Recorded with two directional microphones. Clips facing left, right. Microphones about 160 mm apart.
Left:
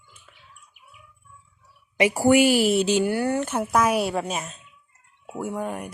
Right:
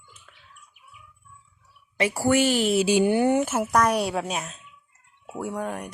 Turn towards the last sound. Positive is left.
turn(degrees=0)  # may be behind; listen again after turning